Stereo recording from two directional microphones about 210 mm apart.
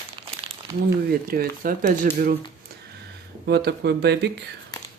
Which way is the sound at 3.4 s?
50° right (ahead or behind).